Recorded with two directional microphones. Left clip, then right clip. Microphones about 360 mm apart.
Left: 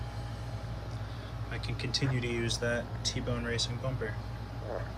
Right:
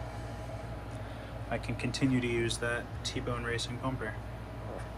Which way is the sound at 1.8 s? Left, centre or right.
Centre.